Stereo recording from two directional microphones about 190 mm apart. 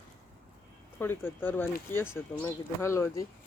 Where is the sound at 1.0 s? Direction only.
10° left (ahead or behind).